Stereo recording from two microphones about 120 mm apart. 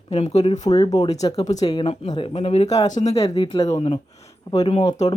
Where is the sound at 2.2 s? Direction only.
50° left (ahead or behind).